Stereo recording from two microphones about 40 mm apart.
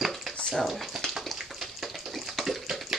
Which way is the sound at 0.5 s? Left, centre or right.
Centre.